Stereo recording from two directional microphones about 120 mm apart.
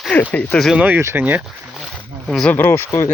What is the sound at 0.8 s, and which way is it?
Speech, 15° right (ahead or behind).